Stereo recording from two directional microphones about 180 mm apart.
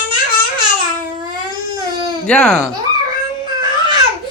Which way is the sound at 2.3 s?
5° left (ahead or behind).